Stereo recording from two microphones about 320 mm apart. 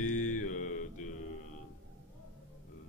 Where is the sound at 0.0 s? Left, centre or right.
Left.